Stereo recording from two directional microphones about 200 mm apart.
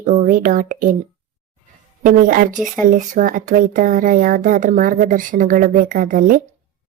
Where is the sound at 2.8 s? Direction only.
40° right (ahead or behind).